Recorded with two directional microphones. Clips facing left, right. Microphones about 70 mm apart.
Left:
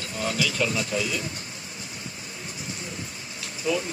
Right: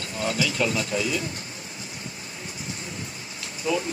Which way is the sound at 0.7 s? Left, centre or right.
Right.